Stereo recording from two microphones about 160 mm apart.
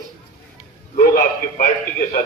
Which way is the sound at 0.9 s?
65° left (ahead or behind).